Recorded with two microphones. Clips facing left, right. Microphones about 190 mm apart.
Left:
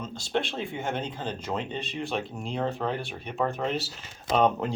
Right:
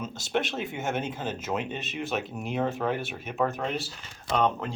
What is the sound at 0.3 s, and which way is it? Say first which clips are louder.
Speech: even; 20° right (ahead or behind).